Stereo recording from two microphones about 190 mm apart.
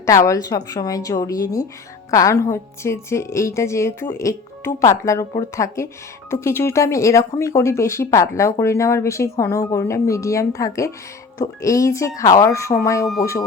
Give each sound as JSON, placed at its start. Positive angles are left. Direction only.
{"t": 0.0, "sound": "a woman's voice", "side_deg": 15}